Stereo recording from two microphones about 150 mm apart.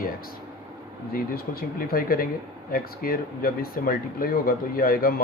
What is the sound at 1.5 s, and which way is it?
Speech, 90° left.